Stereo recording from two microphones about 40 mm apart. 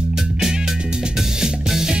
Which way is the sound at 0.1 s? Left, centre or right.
Centre.